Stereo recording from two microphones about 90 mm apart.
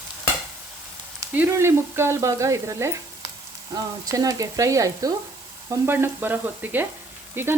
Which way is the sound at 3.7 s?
45° right (ahead or behind).